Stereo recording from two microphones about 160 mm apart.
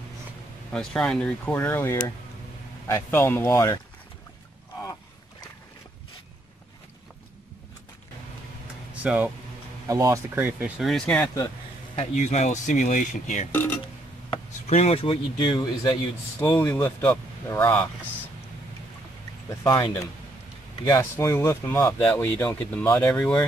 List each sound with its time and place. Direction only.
0.7 s speech: 5° left (ahead or behind)
8.9 s speech: 5° right (ahead or behind)
9.8 s speech: 20° right (ahead or behind)
10.8 s speech: 5° left (ahead or behind)
11.9 s speech: 45° left (ahead or behind)
13.5 s speech: 10° left (ahead or behind)
14.7 s speech: 40° left (ahead or behind)
16.3 s speech: 15° left (ahead or behind)
19.5 s speech: 20° left (ahead or behind)